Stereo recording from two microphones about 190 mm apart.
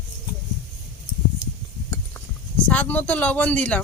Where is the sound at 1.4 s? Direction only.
40° left (ahead or behind).